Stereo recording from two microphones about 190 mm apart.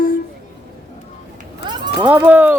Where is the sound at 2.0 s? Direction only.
10° right (ahead or behind).